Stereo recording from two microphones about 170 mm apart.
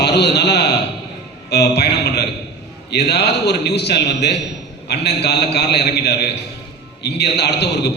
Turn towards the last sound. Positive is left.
turn(degrees=80)